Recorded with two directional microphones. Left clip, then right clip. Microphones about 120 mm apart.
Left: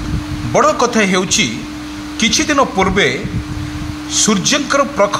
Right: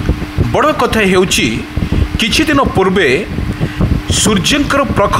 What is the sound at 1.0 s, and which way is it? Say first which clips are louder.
Speech: right 3 dB; 45° right (ahead or behind).